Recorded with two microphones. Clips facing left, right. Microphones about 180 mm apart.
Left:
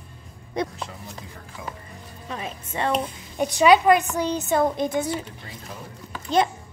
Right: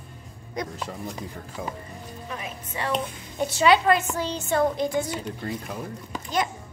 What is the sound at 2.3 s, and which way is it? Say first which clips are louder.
Speech: left 4 dB; 30° left (ahead or behind).